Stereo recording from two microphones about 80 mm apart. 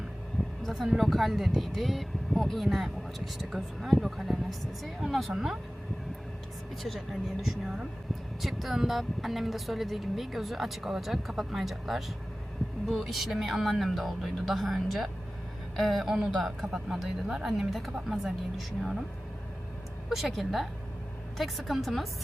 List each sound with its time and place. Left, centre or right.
0.6 s speech: centre
6.8 s speech: centre
20.1 s speech: centre